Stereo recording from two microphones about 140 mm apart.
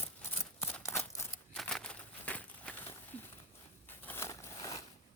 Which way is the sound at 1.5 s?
5° left (ahead or behind).